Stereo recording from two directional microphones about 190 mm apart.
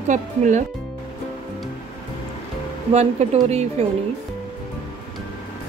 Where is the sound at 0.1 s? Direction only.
40° right (ahead or behind).